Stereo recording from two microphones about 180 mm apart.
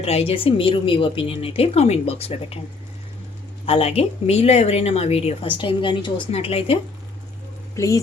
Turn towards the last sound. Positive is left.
turn(degrees=20)  # may be behind; listen again after turning